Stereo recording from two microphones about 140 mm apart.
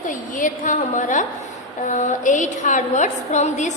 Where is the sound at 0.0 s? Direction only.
65° left (ahead or behind).